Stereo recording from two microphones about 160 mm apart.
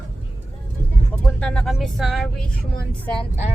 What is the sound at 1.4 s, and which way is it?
Speech, 5° left (ahead or behind).